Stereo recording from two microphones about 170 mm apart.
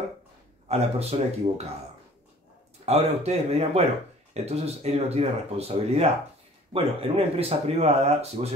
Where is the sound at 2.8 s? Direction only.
40° right (ahead or behind).